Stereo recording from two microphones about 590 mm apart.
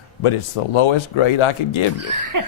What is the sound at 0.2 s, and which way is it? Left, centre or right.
Speech, left.